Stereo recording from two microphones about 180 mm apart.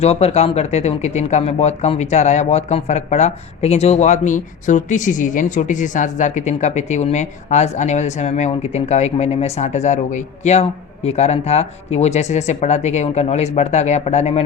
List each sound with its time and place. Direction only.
0.0 s speech: 35° left (ahead or behind)